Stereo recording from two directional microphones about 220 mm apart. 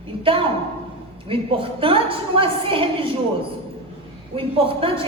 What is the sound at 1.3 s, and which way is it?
A woman's voice, 25° right (ahead or behind).